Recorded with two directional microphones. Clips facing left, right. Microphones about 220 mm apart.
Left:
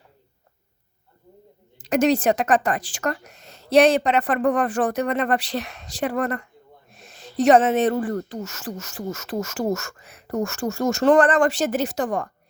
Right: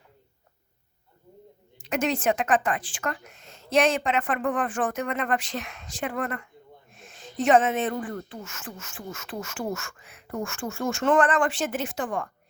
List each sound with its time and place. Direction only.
1.8 s speech: 40° left (ahead or behind)